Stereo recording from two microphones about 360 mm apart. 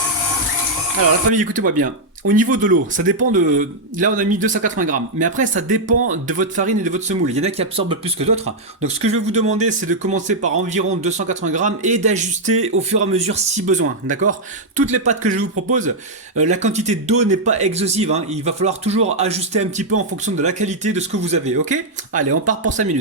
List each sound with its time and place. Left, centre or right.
1.3 s speech: right
14.8 s speech: centre